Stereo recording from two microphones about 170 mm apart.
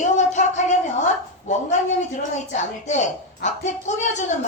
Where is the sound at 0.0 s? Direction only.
45° left (ahead or behind).